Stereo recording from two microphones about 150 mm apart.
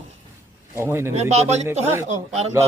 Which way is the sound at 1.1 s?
45° right (ahead or behind).